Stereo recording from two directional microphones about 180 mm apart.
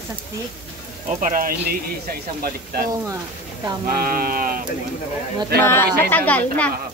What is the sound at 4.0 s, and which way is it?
Speech, 55° right (ahead or behind).